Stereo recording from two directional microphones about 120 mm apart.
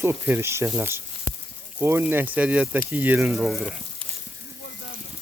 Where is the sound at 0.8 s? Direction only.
20° right (ahead or behind).